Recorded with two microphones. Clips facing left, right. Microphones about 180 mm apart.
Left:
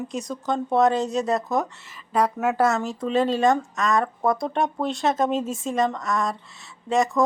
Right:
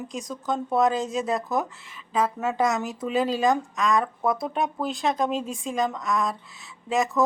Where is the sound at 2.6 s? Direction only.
15° right (ahead or behind).